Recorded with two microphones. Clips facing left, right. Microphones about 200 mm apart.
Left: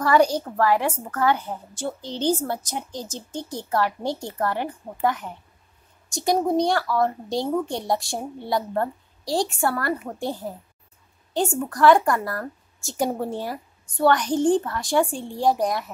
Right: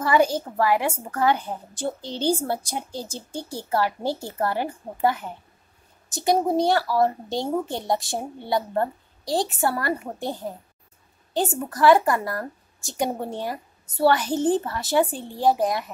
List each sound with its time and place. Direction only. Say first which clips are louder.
0.0 s a woman's voice: left 1 dB; 5° right (ahead or behind)
13.9 s a woman's voice: left 1 dB; 5° right (ahead or behind)